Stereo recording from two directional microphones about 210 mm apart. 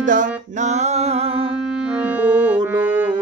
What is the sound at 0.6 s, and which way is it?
Mantra, 35° right (ahead or behind).